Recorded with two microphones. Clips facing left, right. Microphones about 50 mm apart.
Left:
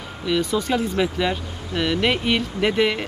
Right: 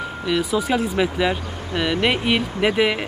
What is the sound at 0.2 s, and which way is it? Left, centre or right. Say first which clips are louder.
Speech: even; centre.